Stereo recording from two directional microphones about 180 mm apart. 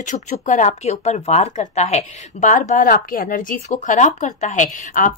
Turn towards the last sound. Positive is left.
turn(degrees=45)  # may be behind; listen again after turning